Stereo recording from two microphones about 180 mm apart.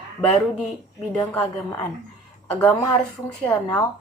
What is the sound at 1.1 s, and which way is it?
A woman's voice, 5° left (ahead or behind).